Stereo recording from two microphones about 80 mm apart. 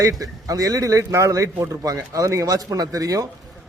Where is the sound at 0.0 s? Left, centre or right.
Right.